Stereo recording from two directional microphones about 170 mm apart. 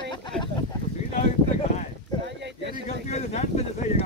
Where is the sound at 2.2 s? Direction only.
90° right.